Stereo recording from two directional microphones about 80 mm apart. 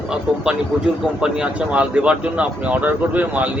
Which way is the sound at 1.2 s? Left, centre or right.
Centre.